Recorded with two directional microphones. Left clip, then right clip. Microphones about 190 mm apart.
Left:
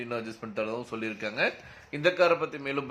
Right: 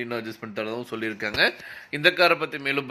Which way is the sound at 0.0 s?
10° right (ahead or behind).